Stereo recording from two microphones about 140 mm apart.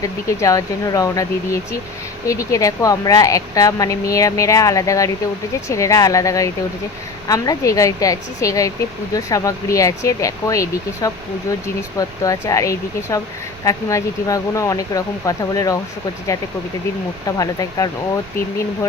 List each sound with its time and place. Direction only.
0.0 s speech: 25° left (ahead or behind)
17.2 s speech: 25° left (ahead or behind)